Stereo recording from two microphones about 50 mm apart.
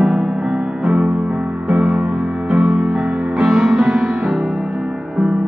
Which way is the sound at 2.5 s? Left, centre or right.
Centre.